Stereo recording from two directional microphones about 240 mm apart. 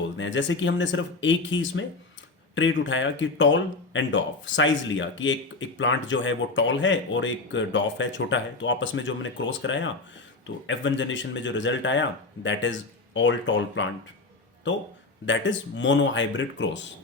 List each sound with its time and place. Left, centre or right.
0.2 s speech: left
15.3 s speech: left